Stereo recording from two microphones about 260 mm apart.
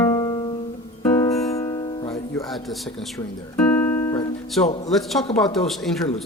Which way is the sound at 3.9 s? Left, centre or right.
Centre.